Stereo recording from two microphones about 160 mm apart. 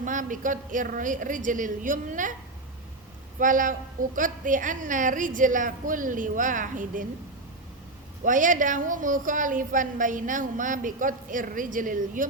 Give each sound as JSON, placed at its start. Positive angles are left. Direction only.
{"t": 0.0, "sound": "a woman's voice", "side_deg": -55}
{"t": 3.3, "sound": "a woman's voice", "side_deg": -55}
{"t": 8.2, "sound": "a woman's voice", "side_deg": -55}